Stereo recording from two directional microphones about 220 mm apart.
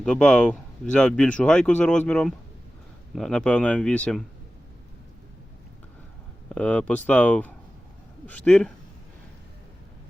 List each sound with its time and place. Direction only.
0.0 s speech: 5° left (ahead or behind)
6.5 s speech: 5° left (ahead or behind)